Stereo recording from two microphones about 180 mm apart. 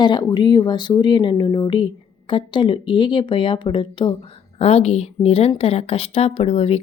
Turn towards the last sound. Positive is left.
turn(degrees=35)  # may be behind; listen again after turning